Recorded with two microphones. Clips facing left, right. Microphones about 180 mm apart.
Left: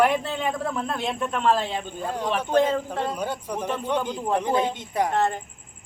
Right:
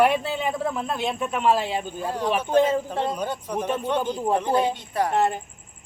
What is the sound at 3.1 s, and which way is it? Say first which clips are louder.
Speech: even; 10° left (ahead or behind).